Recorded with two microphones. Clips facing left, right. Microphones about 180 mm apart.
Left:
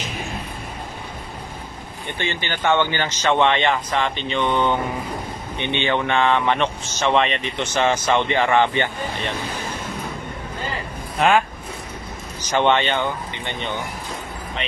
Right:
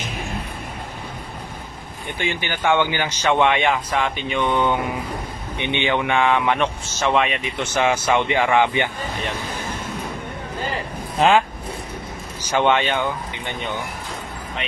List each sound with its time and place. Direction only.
2.1 s speech: 10° right (ahead or behind)
12.5 s speech: 5° right (ahead or behind)